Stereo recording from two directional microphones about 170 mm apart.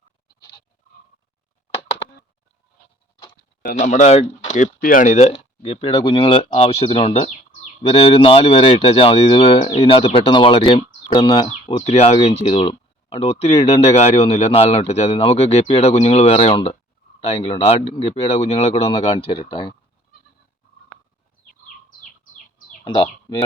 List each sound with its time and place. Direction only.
3.8 s speech: 45° left (ahead or behind); by 19.7 s 25° left (ahead or behind)
22.8 s speech: 30° left (ahead or behind)